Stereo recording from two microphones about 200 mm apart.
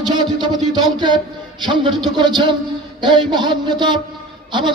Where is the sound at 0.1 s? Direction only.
20° right (ahead or behind).